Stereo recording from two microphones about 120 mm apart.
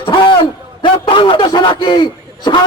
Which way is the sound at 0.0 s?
45° left (ahead or behind).